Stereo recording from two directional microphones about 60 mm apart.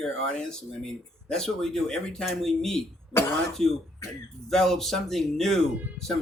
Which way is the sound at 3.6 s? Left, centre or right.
Centre.